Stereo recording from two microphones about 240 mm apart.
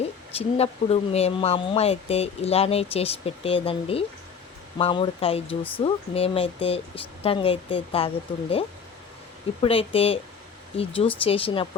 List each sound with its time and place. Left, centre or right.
0.0 s speech: left